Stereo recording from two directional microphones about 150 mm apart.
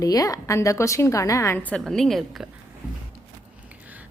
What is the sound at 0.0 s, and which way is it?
A woman's voice, 25° left (ahead or behind).